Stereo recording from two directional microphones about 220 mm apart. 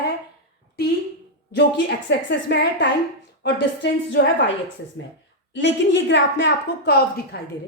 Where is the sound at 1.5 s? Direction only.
50° left (ahead or behind).